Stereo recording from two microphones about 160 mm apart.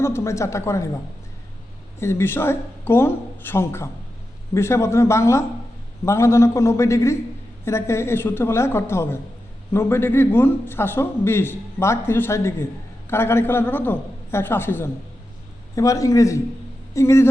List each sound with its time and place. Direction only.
0.0 s a man's voice: 15° left (ahead or behind)
2.0 s a man's voice: 15° left (ahead or behind)